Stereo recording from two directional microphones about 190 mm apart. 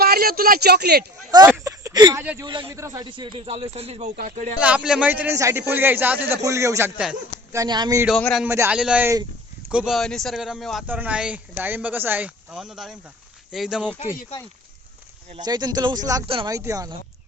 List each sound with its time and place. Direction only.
0.0 s speech: 55° right (ahead or behind)
1.5 s a sound: 15° right (ahead or behind)
2.4 s a man's voice: 25° right (ahead or behind); by 4.5 s 40° right (ahead or behind)
4.6 s a man's voice: 5° right (ahead or behind)
8.0 s a man's voice: centre (ahead or behind)
8.4 s a man's voice: 10° right (ahead or behind)
14.0 s speech: 45° left (ahead or behind)
15.4 s a man's voice: 20° right (ahead or behind)